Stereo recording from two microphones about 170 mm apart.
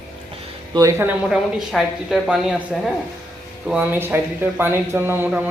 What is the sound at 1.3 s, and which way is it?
A man's voice, centre (ahead or behind).